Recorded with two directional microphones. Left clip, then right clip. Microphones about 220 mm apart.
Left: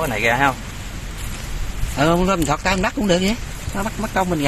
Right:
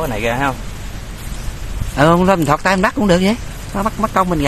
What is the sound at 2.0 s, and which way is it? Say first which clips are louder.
Speech: right 5 dB; 20° right (ahead or behind).